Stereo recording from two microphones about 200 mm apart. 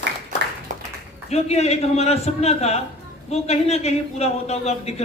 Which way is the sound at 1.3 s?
30° left (ahead or behind).